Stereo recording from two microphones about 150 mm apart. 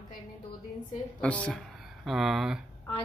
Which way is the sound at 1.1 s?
10° left (ahead or behind).